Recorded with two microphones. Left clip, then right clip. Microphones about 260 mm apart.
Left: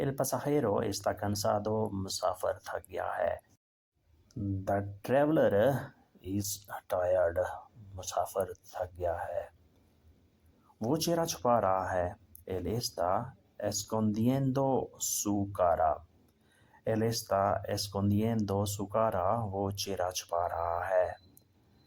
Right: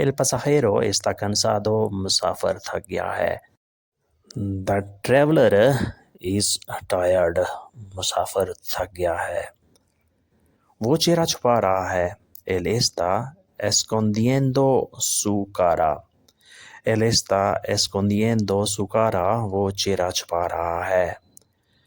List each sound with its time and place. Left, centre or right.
0.0 s speech: right
10.8 s speech: right